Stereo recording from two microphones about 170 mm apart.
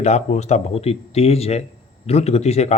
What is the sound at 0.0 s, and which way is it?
Speech, 40° left (ahead or behind).